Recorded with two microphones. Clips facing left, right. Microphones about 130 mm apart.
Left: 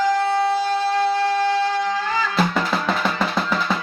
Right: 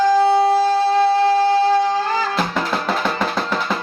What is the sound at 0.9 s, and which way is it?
Music, 30° right (ahead or behind).